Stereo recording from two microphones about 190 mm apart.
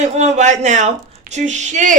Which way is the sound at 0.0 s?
35° right (ahead or behind).